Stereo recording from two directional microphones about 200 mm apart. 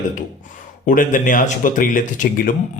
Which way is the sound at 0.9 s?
40° left (ahead or behind).